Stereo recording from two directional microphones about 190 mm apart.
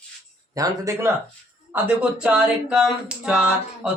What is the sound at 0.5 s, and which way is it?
Speech, 15° right (ahead or behind).